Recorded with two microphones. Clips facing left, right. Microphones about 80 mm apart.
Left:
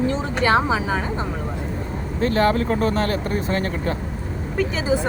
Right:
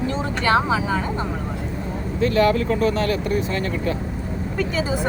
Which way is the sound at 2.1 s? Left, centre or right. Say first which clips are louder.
Right 1 dB; left.